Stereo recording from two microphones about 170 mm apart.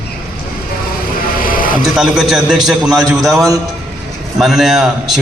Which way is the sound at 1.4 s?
55° left (ahead or behind).